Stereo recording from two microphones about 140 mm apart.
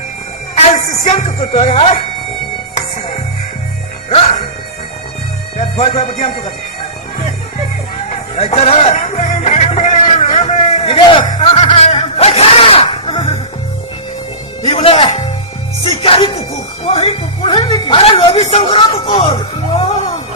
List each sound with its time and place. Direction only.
0.5 s speech: 50° left (ahead or behind)
5.5 s music: 50° left (ahead or behind)
8.1 s speech: 50° left (ahead or behind)
9.2 s music: 50° left (ahead or behind)
10.2 s a sound: 45° left (ahead or behind)
11.3 s snicker: 45° left (ahead or behind)
14.6 s music: 45° left (ahead or behind)
15.8 s speech: 40° left (ahead or behind)